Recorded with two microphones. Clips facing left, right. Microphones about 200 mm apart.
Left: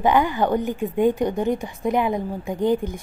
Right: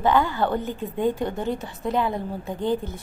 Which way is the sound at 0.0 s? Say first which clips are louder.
Left 2 dB; 15° left (ahead or behind).